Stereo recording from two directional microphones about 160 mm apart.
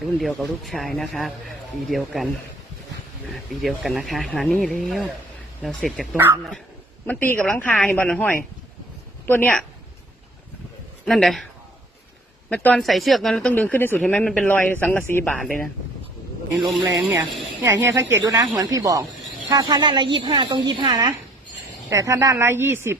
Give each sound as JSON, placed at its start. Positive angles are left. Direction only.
{"t": 0.2, "sound": "speech", "side_deg": 0}
{"t": 3.5, "sound": "speech", "side_deg": 0}
{"t": 6.1, "sound": "speech", "side_deg": -15}
{"t": 7.1, "sound": "speech", "side_deg": 10}
{"t": 11.0, "sound": "a man's voice", "side_deg": 0}
{"t": 12.5, "sound": "speech", "side_deg": 5}
{"t": 17.6, "sound": "a woman's voice", "side_deg": -15}